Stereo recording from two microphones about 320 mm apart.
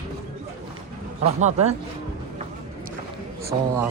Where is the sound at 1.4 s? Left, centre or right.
Right.